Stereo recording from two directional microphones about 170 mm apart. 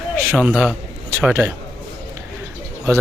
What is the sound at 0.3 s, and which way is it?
A man's voice, 5° right (ahead or behind).